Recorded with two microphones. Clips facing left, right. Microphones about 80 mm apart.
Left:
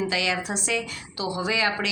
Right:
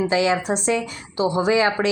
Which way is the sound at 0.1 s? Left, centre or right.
Right.